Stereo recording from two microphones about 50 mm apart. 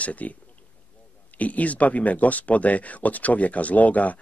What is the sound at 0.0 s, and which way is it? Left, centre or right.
Speech, left.